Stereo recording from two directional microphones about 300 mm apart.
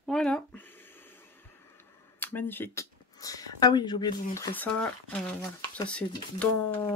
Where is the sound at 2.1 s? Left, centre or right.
Centre.